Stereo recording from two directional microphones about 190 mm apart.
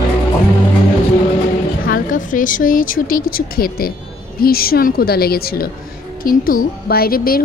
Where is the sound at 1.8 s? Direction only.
45° left (ahead or behind).